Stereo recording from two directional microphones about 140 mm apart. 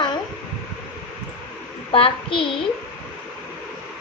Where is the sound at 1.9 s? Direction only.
40° left (ahead or behind).